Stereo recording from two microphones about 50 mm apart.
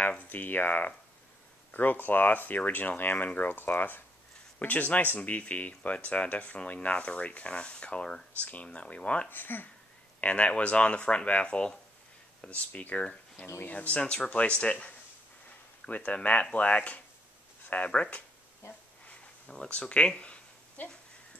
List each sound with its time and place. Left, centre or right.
0.3 s speech: left
9.3 s speech: left
10.2 s speech: left
19.0 s a sound: centre